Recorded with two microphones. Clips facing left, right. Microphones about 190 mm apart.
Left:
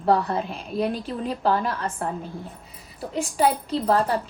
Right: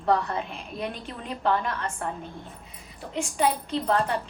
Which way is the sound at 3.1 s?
35° left (ahead or behind).